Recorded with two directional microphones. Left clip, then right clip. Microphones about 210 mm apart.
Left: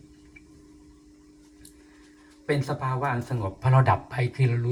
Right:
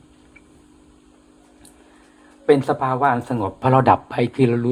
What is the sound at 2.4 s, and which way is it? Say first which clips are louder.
Speech: right 11 dB; 45° right (ahead or behind).